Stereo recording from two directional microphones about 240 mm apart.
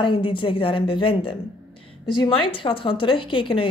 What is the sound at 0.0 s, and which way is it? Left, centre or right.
A woman's voice, left.